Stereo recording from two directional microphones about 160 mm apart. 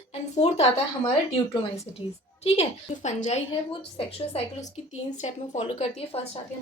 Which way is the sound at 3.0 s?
45° left (ahead or behind).